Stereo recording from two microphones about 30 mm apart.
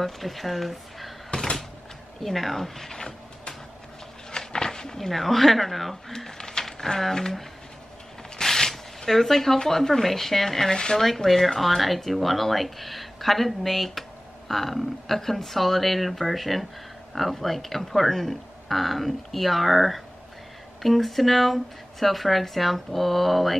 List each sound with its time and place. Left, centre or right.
0.0 s speech: centre
1.3 s door: left
2.2 s speech: centre
4.3 s a sound: left
5.0 s speech: centre
6.1 s speech: centre
8.4 s shuffling cards: centre
9.7 s speech: centre
10.7 s speech: left
11.0 s speech: centre